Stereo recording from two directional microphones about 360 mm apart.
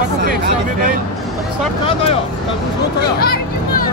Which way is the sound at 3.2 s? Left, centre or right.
Left.